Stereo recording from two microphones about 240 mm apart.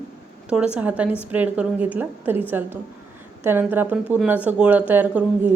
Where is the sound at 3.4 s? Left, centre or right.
Centre.